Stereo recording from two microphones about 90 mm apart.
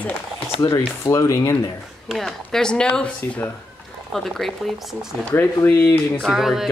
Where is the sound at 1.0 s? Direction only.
35° left (ahead or behind).